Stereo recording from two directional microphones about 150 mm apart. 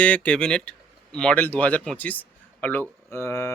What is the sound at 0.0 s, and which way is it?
Speech, 10° left (ahead or behind).